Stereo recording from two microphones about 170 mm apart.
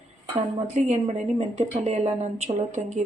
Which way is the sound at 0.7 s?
35° right (ahead or behind).